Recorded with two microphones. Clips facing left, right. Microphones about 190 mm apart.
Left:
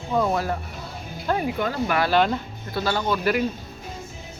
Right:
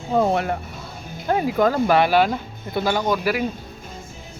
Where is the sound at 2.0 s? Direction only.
10° right (ahead or behind).